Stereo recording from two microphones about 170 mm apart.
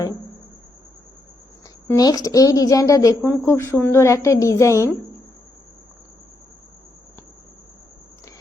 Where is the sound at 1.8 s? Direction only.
20° left (ahead or behind).